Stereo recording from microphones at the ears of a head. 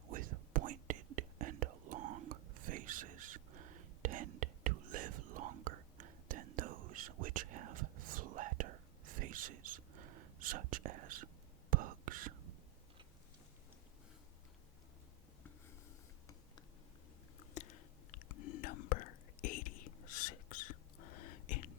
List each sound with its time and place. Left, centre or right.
0.1 s whispering: right
17.4 s whispering: left